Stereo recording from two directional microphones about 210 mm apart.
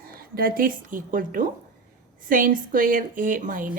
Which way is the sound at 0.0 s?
45° right (ahead or behind).